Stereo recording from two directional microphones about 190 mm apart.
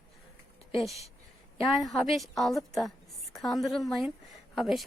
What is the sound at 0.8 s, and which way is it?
Speech, centre (ahead or behind).